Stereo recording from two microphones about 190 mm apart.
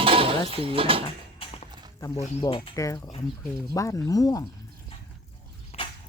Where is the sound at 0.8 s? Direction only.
30° right (ahead or behind).